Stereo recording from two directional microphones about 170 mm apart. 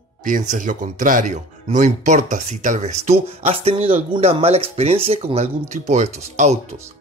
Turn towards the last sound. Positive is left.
turn(degrees=-40)  # may be behind; listen again after turning